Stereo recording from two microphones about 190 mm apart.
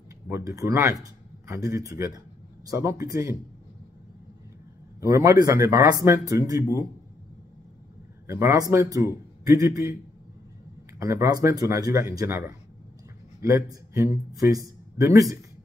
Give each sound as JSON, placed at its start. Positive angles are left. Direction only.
{"t": 0.3, "sound": "speech", "side_deg": -15}
{"t": 5.0, "sound": "speech", "side_deg": -15}
{"t": 8.3, "sound": "speech", "side_deg": -15}
{"t": 11.0, "sound": "a man's voice", "side_deg": -15}